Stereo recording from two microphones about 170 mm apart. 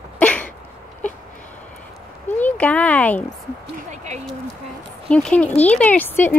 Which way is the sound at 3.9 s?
45° right (ahead or behind).